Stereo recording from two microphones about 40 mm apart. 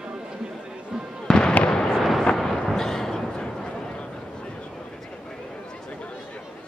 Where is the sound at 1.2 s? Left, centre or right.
Centre.